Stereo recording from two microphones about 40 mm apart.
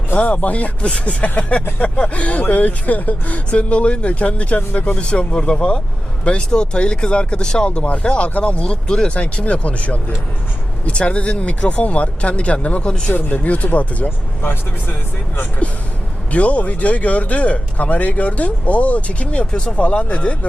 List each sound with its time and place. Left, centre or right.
0.2 s speech: left
8.6 s speech: left
13.1 s speech: left
13.4 s speech: left
14.4 s speech: left
16.3 s speech: left